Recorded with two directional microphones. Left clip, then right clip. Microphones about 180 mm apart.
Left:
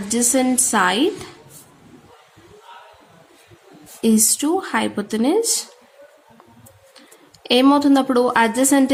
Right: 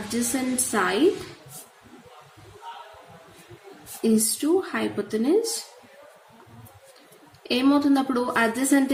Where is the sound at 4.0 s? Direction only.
50° left (ahead or behind).